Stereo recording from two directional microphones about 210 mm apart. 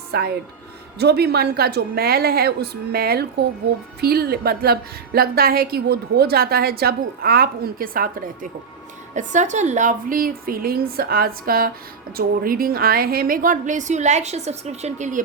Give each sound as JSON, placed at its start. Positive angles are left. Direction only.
{"t": 0.1, "sound": "a woman's voice", "side_deg": -50}